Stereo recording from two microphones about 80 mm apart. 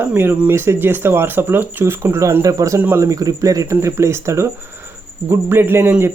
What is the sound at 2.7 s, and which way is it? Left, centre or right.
Speech, right.